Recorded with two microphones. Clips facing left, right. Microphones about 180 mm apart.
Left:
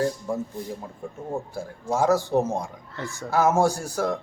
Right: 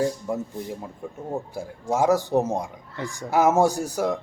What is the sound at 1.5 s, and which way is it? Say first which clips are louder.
A man's voice: right 1 dB; 15° right (ahead or behind).